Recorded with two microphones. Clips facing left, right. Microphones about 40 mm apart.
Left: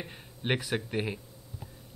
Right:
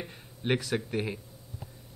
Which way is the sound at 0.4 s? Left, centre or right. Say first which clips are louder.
Right 1 dB; left.